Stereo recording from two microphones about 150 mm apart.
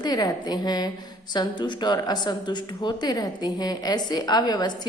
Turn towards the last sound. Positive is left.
turn(degrees=30)  # may be behind; listen again after turning